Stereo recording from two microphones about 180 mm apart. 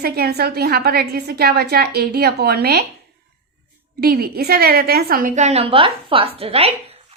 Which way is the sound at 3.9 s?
55° right (ahead or behind).